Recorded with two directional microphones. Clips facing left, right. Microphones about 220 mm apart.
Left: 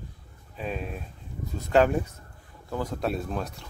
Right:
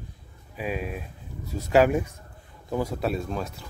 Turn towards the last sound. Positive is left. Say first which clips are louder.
# right 1 dB
turn(degrees=0)  # may be behind; listen again after turning